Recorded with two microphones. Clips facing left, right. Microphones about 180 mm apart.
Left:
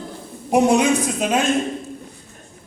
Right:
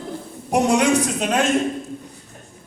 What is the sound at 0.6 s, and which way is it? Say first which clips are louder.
Speech: left 1 dB; 80° right.